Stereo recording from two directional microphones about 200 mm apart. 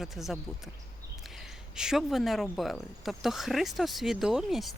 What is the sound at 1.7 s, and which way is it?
Speech, 5° right (ahead or behind).